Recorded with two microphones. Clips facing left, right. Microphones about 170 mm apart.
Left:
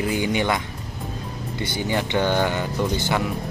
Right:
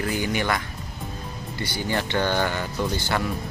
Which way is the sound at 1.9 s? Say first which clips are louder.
Left 2 dB; 15° left (ahead or behind).